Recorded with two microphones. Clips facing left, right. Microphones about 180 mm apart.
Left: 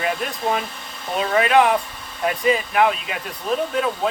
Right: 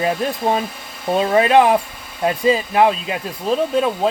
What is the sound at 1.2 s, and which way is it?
Speech, 30° right (ahead or behind).